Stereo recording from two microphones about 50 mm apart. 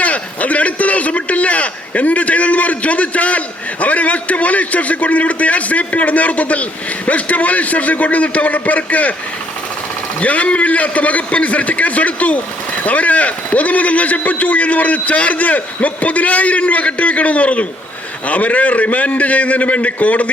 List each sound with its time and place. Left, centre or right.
0.0 s a man's voice: left
10.2 s a man's voice: left